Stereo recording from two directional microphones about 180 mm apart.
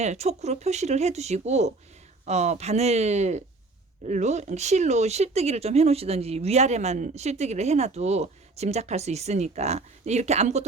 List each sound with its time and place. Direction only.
0.0 s speech: 40° right (ahead or behind)